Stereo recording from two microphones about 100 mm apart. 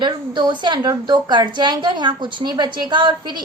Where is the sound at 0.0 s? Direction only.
50° right (ahead or behind).